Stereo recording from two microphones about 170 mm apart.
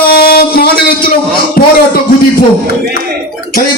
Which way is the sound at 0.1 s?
65° left (ahead or behind).